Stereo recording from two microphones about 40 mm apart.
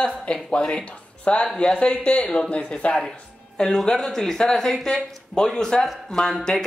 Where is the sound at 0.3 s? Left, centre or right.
Left.